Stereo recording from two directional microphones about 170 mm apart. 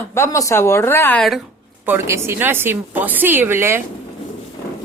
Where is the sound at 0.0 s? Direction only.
15° left (ahead or behind).